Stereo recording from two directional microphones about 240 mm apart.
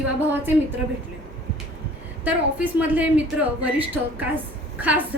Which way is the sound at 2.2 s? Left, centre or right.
Centre.